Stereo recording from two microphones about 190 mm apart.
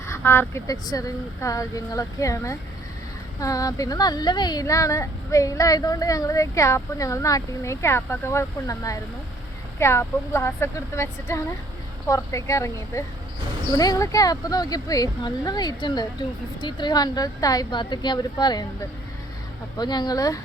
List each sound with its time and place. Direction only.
0.0 s speech: 15° left (ahead or behind)
19.7 s speech: 20° left (ahead or behind)